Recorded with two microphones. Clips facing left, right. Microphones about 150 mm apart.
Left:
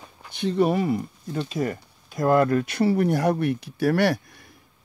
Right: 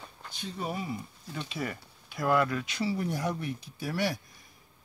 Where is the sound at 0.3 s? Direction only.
70° left (ahead or behind).